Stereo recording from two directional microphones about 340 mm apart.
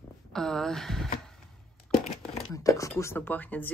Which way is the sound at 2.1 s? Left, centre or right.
Centre.